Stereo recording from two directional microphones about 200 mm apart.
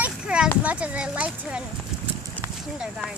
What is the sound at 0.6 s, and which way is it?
Speech, 5° right (ahead or behind).